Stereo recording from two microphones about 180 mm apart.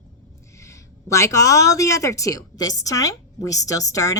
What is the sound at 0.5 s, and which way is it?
A woman's voice, 15° left (ahead or behind).